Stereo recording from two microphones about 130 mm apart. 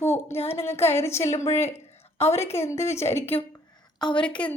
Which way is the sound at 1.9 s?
55° left (ahead or behind).